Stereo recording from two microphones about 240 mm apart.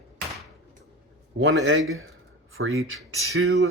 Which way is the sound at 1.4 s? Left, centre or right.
Right.